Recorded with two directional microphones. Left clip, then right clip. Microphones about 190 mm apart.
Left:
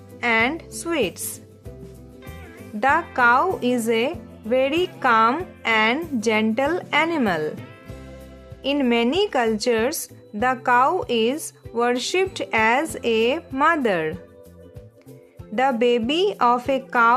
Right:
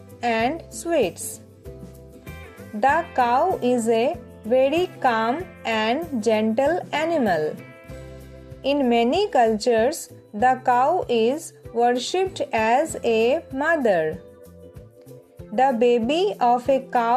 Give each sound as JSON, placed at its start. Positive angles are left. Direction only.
{"t": 0.2, "sound": "speech", "side_deg": 10}
{"t": 2.8, "sound": "speech", "side_deg": 15}
{"t": 8.6, "sound": "speech", "side_deg": 15}
{"t": 15.5, "sound": "speech", "side_deg": 15}